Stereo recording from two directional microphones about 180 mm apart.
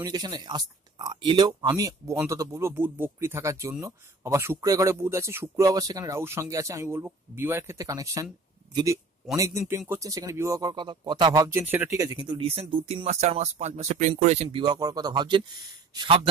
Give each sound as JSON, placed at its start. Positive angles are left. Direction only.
{"t": 0.0, "sound": "speech", "side_deg": -20}
{"t": 14.6, "sound": "speech", "side_deg": -20}